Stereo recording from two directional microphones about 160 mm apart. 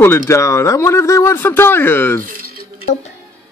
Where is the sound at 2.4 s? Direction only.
70° right (ahead or behind).